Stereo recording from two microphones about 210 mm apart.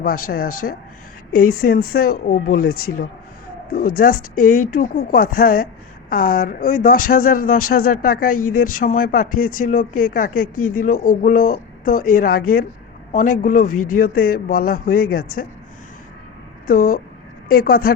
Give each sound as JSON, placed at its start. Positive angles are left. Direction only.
{"t": 0.3, "sound": "speech", "side_deg": 45}
{"t": 13.4, "sound": "speech", "side_deg": 40}
{"t": 16.6, "sound": "speech", "side_deg": 40}